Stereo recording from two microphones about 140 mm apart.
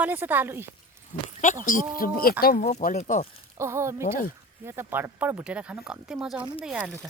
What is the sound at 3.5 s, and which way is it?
A woman's voice, 20° right (ahead or behind).